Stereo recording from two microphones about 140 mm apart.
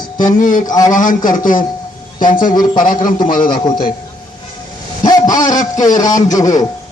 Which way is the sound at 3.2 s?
90° left.